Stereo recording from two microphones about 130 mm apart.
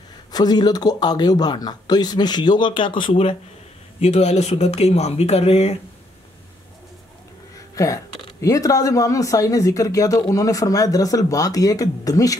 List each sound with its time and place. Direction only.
0.3 s a man's voice: 30° left (ahead or behind)
4.0 s speech: 55° left (ahead or behind)
7.7 s speech: 25° left (ahead or behind)